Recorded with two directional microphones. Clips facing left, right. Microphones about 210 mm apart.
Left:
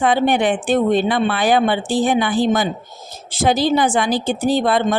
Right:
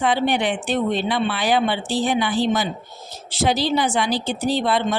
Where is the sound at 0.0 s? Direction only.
50° left (ahead or behind).